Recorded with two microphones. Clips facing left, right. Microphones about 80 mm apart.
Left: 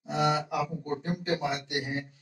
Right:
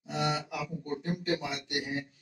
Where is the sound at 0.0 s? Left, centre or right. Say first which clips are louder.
Left 5 dB; left.